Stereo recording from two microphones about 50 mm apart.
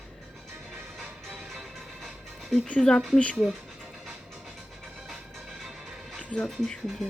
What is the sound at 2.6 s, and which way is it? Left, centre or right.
Speech, centre.